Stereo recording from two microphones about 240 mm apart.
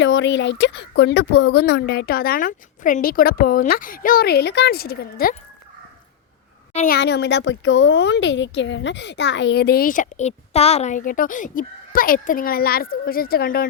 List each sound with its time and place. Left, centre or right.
0.0 s speech: left
6.7 s speech: left